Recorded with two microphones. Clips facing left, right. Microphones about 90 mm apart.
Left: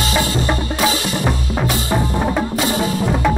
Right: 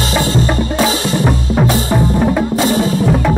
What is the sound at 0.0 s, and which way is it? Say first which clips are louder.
Music: right 3 dB; 35° right (ahead or behind).